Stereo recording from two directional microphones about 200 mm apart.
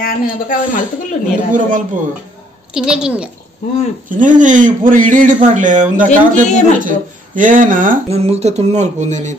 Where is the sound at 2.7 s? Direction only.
5° right (ahead or behind).